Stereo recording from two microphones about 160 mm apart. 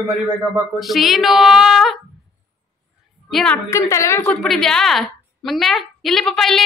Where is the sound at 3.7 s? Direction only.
20° left (ahead or behind).